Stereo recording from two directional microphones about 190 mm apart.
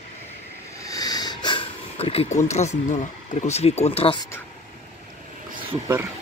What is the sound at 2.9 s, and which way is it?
Speech, 35° left (ahead or behind).